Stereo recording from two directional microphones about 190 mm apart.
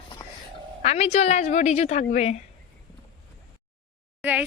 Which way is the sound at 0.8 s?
35° left (ahead or behind).